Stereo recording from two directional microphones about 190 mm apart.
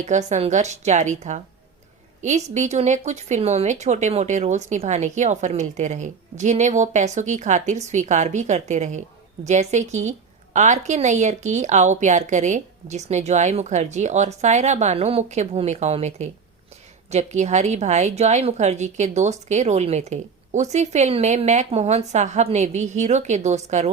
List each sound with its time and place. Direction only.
0.0 s a woman's voice: 40° right (ahead or behind)